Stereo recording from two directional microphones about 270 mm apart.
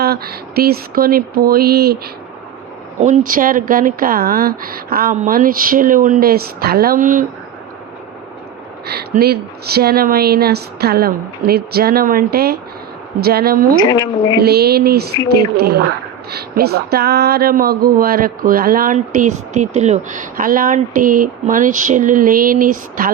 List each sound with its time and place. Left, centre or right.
0.0 s speech: right
3.0 s speech: right
8.9 s speech: right
13.7 s a woman's voice: centre
14.4 s speech: right